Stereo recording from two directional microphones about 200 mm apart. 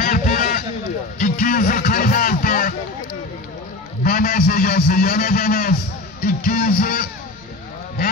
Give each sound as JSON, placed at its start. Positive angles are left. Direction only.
{"t": 0.0, "sound": "a sound", "side_deg": 45}
{"t": 1.2, "sound": "music", "side_deg": 45}
{"t": 4.0, "sound": "a man's voice", "side_deg": 45}
{"t": 6.2, "sound": "music", "side_deg": 45}